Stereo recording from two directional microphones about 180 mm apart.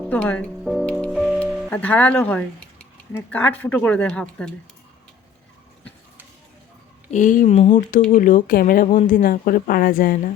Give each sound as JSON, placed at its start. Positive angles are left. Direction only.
{"t": 0.1, "sound": "music", "side_deg": 10}
{"t": 1.7, "sound": "speech", "side_deg": 10}
{"t": 7.1, "sound": "a woman's voice", "side_deg": 45}